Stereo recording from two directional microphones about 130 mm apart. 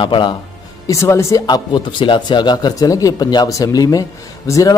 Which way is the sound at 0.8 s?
25° left (ahead or behind).